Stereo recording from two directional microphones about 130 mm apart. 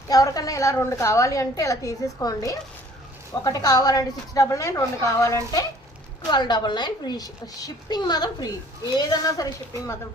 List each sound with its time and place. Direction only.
0.1 s a woman's voice: 30° left (ahead or behind)